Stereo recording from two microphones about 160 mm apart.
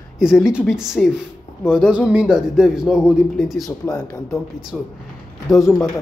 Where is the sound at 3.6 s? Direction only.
20° left (ahead or behind).